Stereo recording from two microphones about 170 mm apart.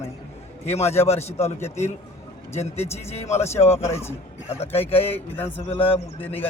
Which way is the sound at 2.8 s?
35° left (ahead or behind).